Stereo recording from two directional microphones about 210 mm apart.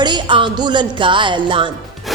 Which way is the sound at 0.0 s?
20° right (ahead or behind).